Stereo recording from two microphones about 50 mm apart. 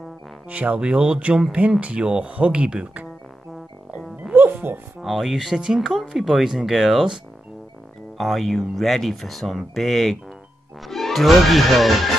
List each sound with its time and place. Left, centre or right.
0.5 s speech: right
0.7 s speech: centre
4.3 s music: right
5.0 s speech: centre
8.2 s speech: centre